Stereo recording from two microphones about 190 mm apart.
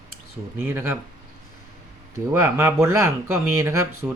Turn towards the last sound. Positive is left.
turn(degrees=-15)  # may be behind; listen again after turning